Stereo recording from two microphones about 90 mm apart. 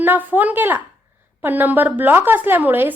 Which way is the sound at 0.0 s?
20° right (ahead or behind).